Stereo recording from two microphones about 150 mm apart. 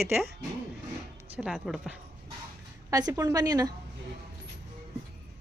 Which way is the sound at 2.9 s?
25° right (ahead or behind).